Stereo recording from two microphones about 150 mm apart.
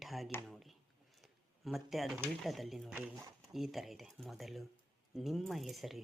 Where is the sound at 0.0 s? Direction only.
Centre (ahead or behind).